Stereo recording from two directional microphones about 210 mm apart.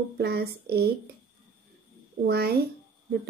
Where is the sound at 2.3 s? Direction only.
50° right (ahead or behind).